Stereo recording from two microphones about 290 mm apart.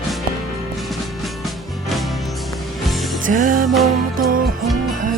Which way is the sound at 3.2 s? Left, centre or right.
Right.